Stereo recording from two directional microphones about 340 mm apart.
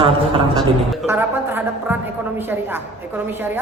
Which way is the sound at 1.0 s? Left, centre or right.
Centre.